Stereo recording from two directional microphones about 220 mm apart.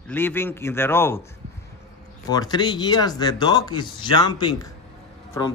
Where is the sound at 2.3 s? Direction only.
20° left (ahead or behind).